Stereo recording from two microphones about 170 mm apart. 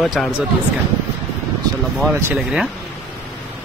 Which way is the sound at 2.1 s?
10° right (ahead or behind).